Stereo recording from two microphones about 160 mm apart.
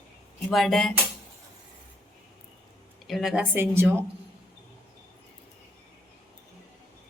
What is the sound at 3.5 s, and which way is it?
Speech, 15° right (ahead or behind).